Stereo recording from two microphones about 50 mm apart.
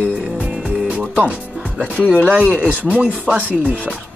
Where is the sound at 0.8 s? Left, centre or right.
Right.